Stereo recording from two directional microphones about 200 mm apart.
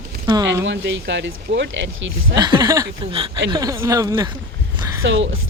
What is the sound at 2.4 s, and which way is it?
Speech, 20° right (ahead or behind).